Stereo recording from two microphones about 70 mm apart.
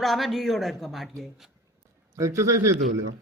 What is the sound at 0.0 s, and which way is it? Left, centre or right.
Speech, centre.